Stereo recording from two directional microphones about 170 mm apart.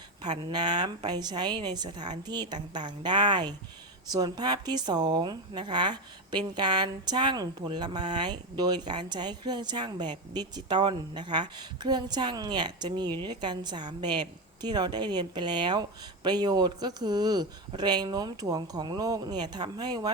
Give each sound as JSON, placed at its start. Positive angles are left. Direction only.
{"t": 0.2, "sound": "speech", "side_deg": -25}